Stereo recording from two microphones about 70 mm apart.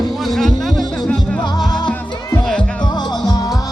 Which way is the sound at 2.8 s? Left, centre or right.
Left.